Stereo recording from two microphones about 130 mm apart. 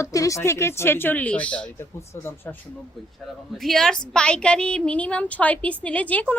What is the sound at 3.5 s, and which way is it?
A woman's voice, centre (ahead or behind).